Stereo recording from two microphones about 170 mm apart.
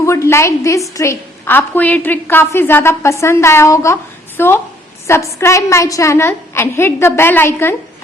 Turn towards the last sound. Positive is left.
turn(degrees=15)  # may be behind; listen again after turning